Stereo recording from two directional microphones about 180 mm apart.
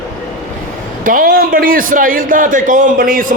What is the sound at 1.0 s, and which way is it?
A man's voice, 50° right (ahead or behind).